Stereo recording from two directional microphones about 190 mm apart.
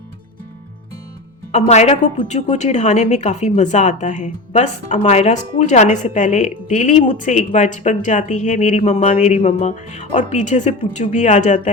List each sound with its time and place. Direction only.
1.5 s a woman's voice: 35° left (ahead or behind)